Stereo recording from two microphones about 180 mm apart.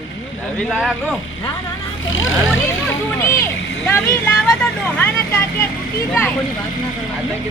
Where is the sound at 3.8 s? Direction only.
15° left (ahead or behind).